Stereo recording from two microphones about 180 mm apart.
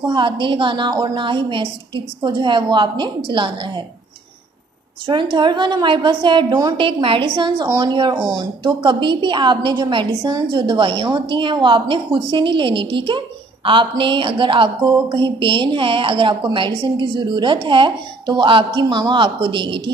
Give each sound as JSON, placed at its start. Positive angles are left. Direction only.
{"t": 0.0, "sound": "a woman's voice", "side_deg": -25}
{"t": 5.0, "sound": "a woman's voice", "side_deg": -25}